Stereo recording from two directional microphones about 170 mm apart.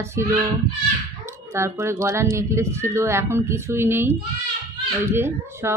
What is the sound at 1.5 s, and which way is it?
Speech, 15° right (ahead or behind).